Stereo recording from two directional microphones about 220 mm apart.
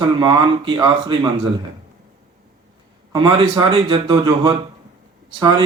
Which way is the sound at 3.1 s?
20° right (ahead or behind).